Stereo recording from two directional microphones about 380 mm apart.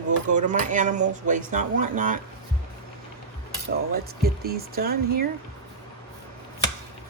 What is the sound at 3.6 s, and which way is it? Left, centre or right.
Speech, right.